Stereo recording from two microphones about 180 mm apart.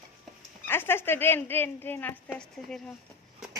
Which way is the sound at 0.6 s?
10° left (ahead or behind).